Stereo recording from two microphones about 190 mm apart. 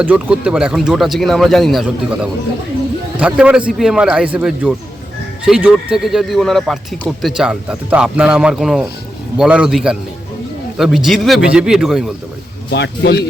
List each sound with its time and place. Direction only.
0.0 s speech: 10° right (ahead or behind)
12.7 s speech: 60° left (ahead or behind)